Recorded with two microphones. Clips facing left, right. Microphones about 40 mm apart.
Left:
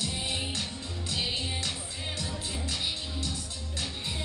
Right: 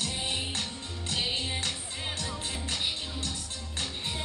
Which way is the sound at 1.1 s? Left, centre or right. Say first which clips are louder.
Right 1 dB; right.